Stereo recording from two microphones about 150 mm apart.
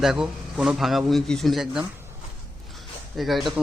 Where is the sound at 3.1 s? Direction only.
Centre (ahead or behind).